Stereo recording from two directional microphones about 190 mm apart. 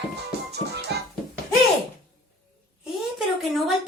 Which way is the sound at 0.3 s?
60° right (ahead or behind).